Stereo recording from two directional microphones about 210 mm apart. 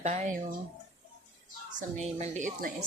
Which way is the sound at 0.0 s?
35° right (ahead or behind).